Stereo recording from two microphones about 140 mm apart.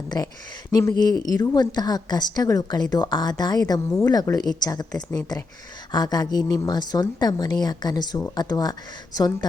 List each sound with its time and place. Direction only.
0.7 s a woman's voice: 25° left (ahead or behind)